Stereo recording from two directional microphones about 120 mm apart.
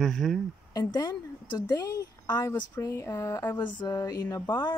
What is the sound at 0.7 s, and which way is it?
A woman's voice, 30° left (ahead or behind).